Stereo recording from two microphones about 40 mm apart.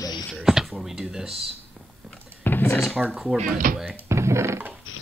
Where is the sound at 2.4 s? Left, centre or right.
Left.